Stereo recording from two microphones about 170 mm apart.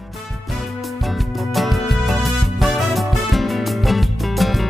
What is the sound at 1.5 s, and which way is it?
Music, centre (ahead or behind).